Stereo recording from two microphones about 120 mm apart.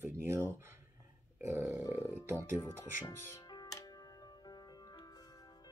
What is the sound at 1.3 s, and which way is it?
Burping, 20° right (ahead or behind).